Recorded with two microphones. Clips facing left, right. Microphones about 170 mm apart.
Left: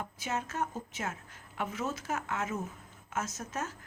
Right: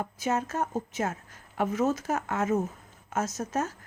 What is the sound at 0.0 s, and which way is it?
A woman's voice, 45° right (ahead or behind).